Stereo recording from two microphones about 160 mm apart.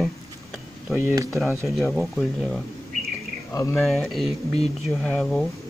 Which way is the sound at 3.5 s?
15° left (ahead or behind).